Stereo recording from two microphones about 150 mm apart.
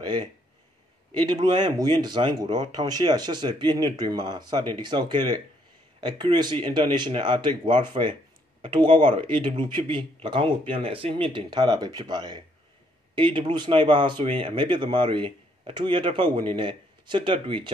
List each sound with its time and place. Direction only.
0.0 s speech: 30° right (ahead or behind)